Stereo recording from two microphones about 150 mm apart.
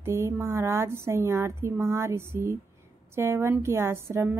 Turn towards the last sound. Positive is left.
turn(degrees=-15)  # may be behind; listen again after turning